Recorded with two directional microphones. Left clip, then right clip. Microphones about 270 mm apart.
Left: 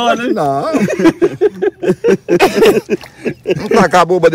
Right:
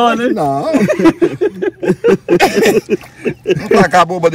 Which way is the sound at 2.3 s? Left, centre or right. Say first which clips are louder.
Left 5 dB; left.